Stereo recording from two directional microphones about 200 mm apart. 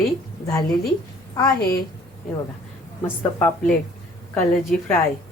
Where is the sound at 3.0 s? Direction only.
5° left (ahead or behind).